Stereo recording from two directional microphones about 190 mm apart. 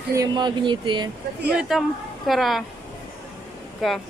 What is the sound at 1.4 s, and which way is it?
A child's voice, 5° right (ahead or behind).